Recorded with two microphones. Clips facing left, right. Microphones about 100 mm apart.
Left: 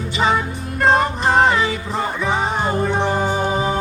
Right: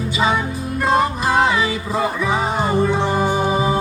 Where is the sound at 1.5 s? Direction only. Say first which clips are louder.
Left 1 dB; 10° right (ahead or behind).